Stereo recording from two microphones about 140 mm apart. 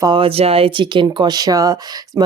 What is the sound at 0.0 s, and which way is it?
Speech, 35° right (ahead or behind).